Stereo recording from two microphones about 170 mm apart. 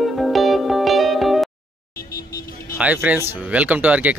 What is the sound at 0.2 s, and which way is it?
Music, centre (ahead or behind).